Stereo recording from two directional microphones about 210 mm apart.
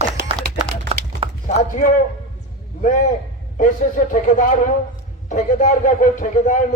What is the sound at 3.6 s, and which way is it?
A man's voice, 40° left (ahead or behind).